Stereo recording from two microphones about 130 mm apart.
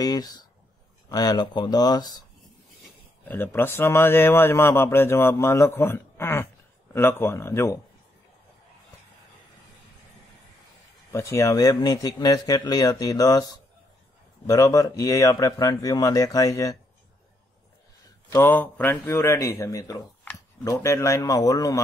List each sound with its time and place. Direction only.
0.0 s speech: 30° left (ahead or behind)
3.3 s speech: 15° left (ahead or behind)
11.1 s speech: 25° left (ahead or behind)
18.3 s speech: 15° left (ahead or behind)